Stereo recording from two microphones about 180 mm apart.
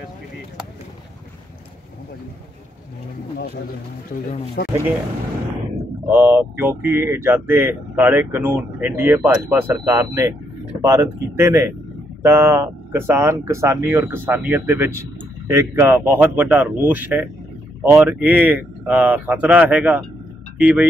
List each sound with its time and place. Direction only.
4.6 s speech: 70° left (ahead or behind)
6.0 s speech: 10° right (ahead or behind)